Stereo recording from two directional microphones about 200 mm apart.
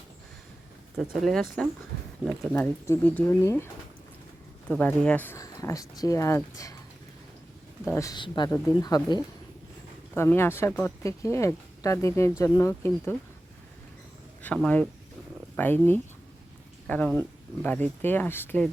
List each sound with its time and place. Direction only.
1.2 s speech: centre (ahead or behind)
4.7 s speech: 5° left (ahead or behind)
7.9 s speech: 15° left (ahead or behind)
14.4 s speech: 5° left (ahead or behind)